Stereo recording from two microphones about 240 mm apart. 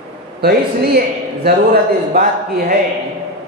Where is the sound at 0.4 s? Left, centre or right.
Right.